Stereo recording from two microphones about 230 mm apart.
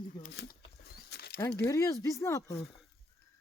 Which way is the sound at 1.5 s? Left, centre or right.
Centre.